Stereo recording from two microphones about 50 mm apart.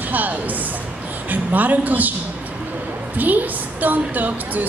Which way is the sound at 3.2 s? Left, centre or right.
Right.